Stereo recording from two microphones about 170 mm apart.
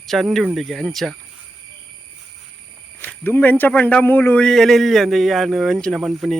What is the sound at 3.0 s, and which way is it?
Speech, 10° left (ahead or behind).